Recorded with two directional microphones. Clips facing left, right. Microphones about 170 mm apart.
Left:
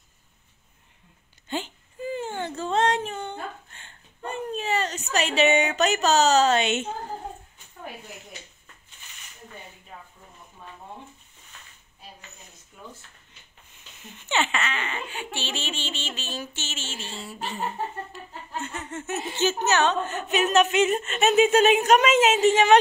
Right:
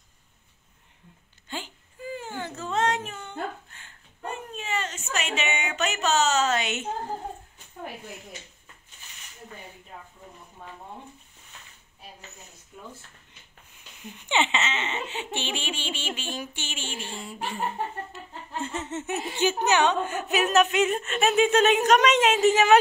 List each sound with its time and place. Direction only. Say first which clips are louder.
1.5 s whimper: left 6 dB; 25° left (ahead or behind)
14.1 s speech: even; 15° right (ahead or behind)
18.6 s speech: right 3 dB; 25° right (ahead or behind); by 22.3 s 5° left (ahead or behind)